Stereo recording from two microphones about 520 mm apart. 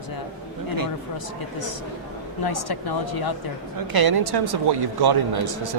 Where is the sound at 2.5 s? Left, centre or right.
Left.